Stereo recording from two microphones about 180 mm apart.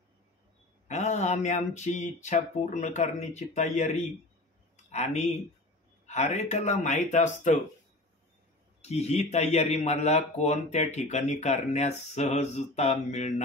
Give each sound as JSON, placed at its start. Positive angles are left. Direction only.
{"t": 0.8, "sound": "a man's voice", "side_deg": 40}
{"t": 8.8, "sound": "a man's voice", "side_deg": 35}